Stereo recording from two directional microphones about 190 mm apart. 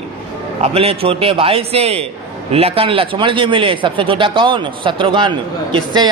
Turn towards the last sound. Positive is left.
turn(degrees=-25)  # may be behind; listen again after turning